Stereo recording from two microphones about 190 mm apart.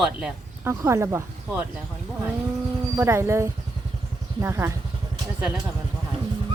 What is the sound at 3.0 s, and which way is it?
Speech, 15° right (ahead or behind).